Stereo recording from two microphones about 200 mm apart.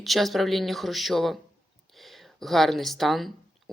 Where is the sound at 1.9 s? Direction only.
Centre (ahead or behind).